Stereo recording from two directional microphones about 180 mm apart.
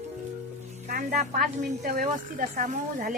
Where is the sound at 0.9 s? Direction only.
50° right (ahead or behind).